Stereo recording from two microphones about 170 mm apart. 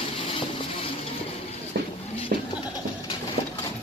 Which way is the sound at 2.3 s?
55° right (ahead or behind).